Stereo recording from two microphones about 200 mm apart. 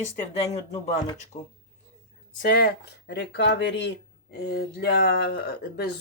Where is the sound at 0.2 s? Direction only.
30° left (ahead or behind).